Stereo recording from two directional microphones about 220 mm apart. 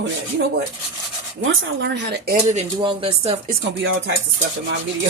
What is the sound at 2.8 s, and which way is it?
Speech, 25° right (ahead or behind).